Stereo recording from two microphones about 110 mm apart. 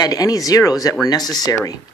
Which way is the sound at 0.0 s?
35° left (ahead or behind).